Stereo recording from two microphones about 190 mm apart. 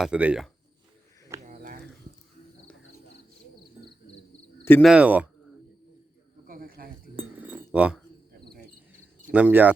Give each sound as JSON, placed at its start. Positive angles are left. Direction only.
{"t": 0.0, "sound": "speech", "side_deg": -5}
{"t": 1.5, "sound": "a sound", "side_deg": -45}
{"t": 4.8, "sound": "speech", "side_deg": -5}
{"t": 6.5, "sound": "cricket", "side_deg": -50}
{"t": 7.2, "sound": "chink", "side_deg": -10}
{"t": 9.3, "sound": "speech", "side_deg": -10}